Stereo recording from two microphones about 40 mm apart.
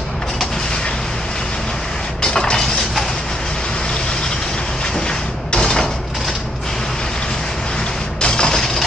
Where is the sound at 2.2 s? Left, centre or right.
Left.